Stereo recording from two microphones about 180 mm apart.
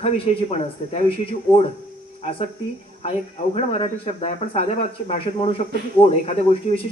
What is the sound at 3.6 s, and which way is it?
Speech, 30° left (ahead or behind).